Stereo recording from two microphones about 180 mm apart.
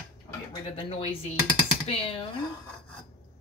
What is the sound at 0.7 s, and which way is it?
A woman's voice, 30° left (ahead or behind).